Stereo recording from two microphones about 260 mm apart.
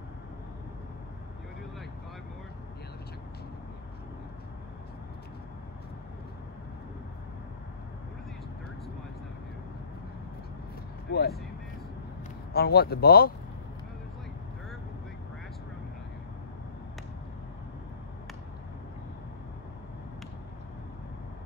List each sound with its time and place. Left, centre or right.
11.1 s vehicle: left
12.5 s speech: left